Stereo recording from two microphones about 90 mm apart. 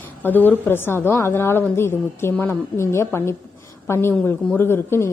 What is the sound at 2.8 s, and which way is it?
Speech, 30° left (ahead or behind).